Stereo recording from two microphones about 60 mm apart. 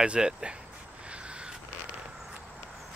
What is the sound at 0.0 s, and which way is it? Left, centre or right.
Speech, centre.